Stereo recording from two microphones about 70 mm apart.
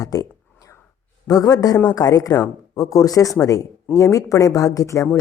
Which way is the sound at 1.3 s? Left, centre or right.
Left.